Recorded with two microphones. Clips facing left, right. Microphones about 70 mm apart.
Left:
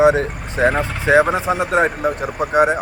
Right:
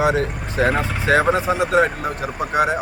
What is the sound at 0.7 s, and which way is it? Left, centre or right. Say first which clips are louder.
Speech: left 1 dB; centre.